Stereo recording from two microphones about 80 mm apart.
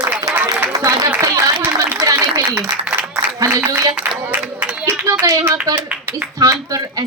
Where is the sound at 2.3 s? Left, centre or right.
Right.